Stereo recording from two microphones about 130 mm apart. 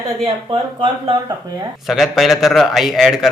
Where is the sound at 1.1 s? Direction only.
30° right (ahead or behind).